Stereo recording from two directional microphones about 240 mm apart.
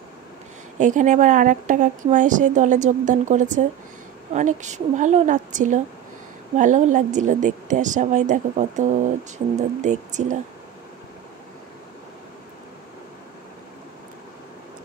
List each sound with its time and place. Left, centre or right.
0.7 s a woman's voice: right